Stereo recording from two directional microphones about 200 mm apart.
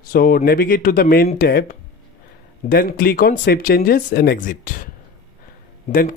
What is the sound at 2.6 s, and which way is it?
Speech, 45° left (ahead or behind).